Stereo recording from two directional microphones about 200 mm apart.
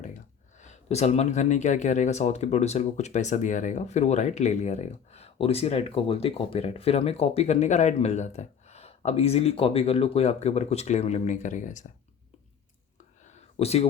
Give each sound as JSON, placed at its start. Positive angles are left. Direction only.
{"t": 0.6, "sound": "speech", "side_deg": 35}
{"t": 13.6, "sound": "speech", "side_deg": 30}